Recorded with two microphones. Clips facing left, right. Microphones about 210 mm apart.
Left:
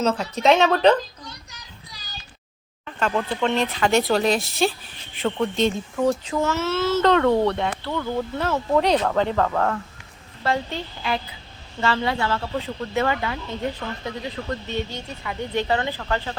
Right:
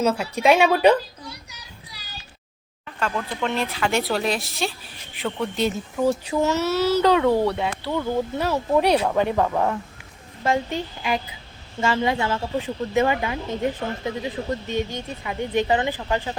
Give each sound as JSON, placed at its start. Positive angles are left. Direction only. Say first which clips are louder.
{"t": 0.0, "sound": "a sound", "louder": "even", "side_deg": -10}
{"t": 3.0, "sound": "speech", "louder": "left 3 dB", "side_deg": -5}
{"t": 6.4, "sound": "speech", "louder": "right 3 dB", "side_deg": -20}
{"t": 6.7, "sound": "a child's voice", "louder": "right 1 dB", "side_deg": -40}
{"t": 7.0, "sound": "speech", "louder": "left 2 dB", "side_deg": -10}